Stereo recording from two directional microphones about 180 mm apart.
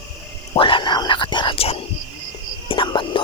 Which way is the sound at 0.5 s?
30° left (ahead or behind).